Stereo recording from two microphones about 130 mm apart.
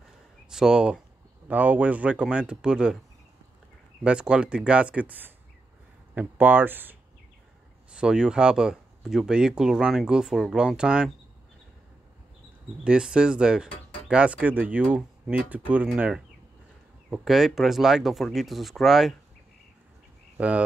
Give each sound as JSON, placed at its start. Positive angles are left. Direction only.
{"t": 0.5, "sound": "speech", "side_deg": -5}
{"t": 4.0, "sound": "speech", "side_deg": -10}
{"t": 12.8, "sound": "speech", "side_deg": -5}
{"t": 20.3, "sound": "speech", "side_deg": -10}